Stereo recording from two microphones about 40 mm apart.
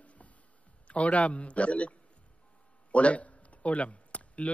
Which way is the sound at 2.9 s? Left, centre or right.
Left.